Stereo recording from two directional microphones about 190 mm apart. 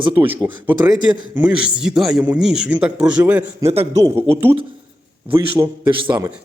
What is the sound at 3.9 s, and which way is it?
Speech, 15° right (ahead or behind).